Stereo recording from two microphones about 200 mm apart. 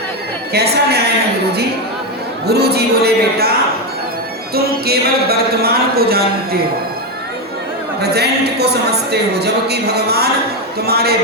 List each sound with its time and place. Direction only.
0.5 s speech: 55° right (ahead or behind)
2.5 s speech: 55° right (ahead or behind)
4.5 s speech: 50° right (ahead or behind)
8.1 s a woman's voice: 55° right (ahead or behind)